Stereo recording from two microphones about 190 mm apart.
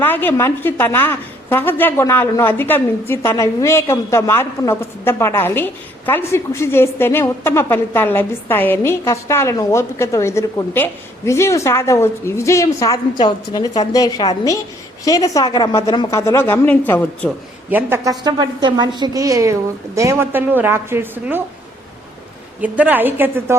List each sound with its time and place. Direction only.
0.0 s a woman's voice: 10° left (ahead or behind)
17.7 s a woman's voice: 10° right (ahead or behind)
22.6 s a woman's voice: 10° right (ahead or behind)